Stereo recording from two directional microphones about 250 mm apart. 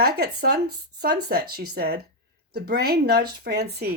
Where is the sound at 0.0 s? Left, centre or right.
Right.